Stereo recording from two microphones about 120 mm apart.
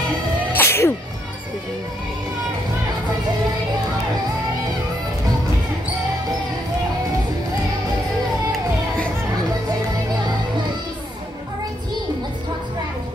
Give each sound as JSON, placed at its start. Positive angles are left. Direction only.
{"t": 0.5, "sound": "music", "side_deg": 20}
{"t": 8.5, "sound": "music", "side_deg": 10}